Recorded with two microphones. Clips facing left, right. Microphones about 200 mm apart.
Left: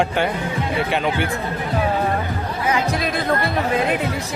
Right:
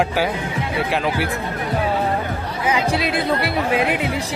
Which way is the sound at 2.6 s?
15° right (ahead or behind).